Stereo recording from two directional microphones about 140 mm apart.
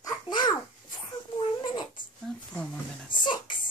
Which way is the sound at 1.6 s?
30° left (ahead or behind).